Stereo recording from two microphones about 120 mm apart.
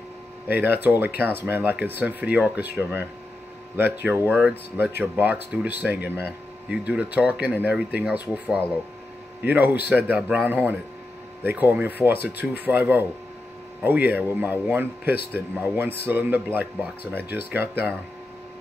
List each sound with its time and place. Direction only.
0.5 s a man's voice: 15° right (ahead or behind)
9.5 s a man's voice: 15° right (ahead or behind)